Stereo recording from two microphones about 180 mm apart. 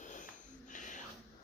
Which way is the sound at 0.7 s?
45° left (ahead or behind).